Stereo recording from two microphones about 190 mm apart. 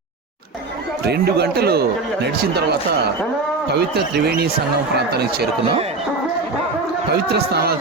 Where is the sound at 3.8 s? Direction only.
60° right (ahead or behind).